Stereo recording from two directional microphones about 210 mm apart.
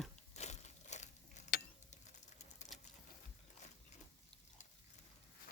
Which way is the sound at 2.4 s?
35° left (ahead or behind).